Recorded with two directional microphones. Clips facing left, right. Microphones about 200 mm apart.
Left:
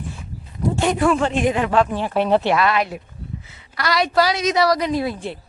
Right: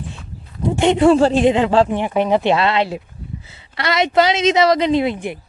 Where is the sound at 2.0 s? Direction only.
15° right (ahead or behind).